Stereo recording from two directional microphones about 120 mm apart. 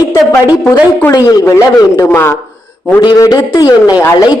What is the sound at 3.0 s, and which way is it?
Speech, 30° left (ahead or behind).